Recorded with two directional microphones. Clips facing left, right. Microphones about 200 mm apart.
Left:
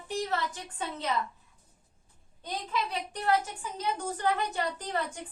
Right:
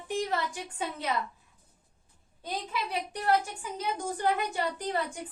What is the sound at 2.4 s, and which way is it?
A woman's voice, 10° right (ahead or behind).